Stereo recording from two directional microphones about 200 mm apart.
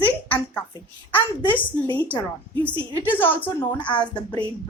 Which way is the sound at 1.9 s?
10° left (ahead or behind).